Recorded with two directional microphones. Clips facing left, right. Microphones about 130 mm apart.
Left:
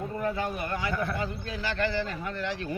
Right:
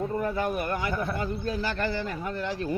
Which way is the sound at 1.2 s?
40° right (ahead or behind).